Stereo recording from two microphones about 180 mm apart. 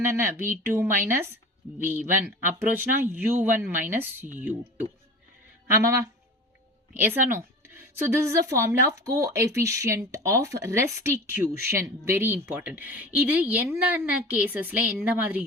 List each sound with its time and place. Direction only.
0.1 s a woman's voice: 15° right (ahead or behind)